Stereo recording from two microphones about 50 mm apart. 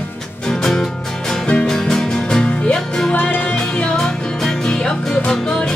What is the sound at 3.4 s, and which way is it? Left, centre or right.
Music, centre.